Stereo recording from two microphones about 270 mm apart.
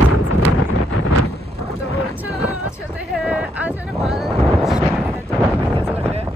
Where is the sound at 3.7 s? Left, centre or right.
Centre.